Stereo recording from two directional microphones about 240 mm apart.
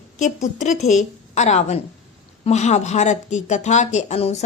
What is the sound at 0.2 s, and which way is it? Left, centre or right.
A woman's voice, left.